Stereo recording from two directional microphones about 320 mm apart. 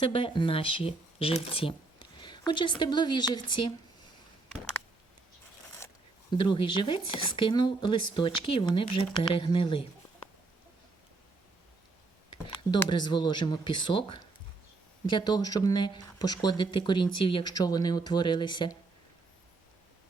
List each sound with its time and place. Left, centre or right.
0.0 s speech: centre
5.8 s zipper: centre
6.3 s speech: centre
7.9 s speech: left
8.5 s speech: centre
12.7 s speech: centre